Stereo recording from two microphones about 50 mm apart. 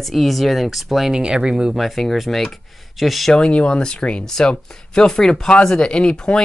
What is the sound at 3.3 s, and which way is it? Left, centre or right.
Speech, centre.